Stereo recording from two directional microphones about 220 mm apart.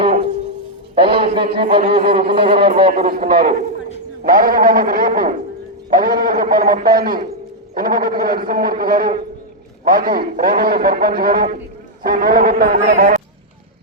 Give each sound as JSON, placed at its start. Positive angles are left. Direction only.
{"t": 0.0, "sound": "music", "side_deg": -25}
{"t": 0.9, "sound": "a sound", "side_deg": -25}
{"t": 1.5, "sound": "speech", "side_deg": -25}
{"t": 3.3, "sound": "a man's voice", "side_deg": -40}